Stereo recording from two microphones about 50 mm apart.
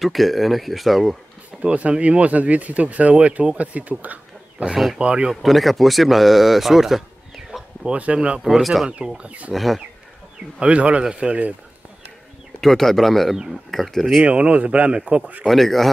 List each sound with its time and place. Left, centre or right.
0.0 s speech: centre
1.6 s speech: right
4.0 s bird: right
4.6 s speech: centre
5.3 s speech: centre
7.8 s speech: right
8.5 s speech: centre
8.8 s speech: centre
9.5 s speech: centre
10.6 s speech: right
12.5 s speech: centre
14.2 s speech: right
15.4 s speech: centre